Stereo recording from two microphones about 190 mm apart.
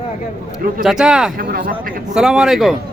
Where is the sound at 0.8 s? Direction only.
5° right (ahead or behind).